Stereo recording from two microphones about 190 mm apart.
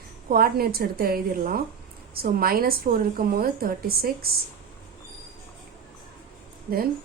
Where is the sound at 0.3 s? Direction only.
50° right (ahead or behind).